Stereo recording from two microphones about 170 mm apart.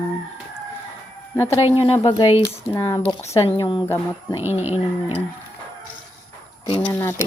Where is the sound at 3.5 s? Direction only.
30° left (ahead or behind).